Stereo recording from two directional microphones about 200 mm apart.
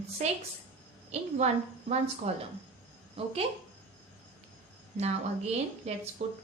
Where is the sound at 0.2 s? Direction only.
35° right (ahead or behind).